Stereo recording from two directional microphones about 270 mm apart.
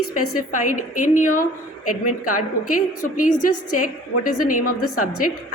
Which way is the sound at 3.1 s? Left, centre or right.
Left.